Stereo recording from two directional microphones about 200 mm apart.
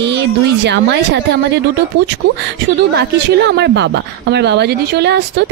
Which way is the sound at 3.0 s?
60° right (ahead or behind).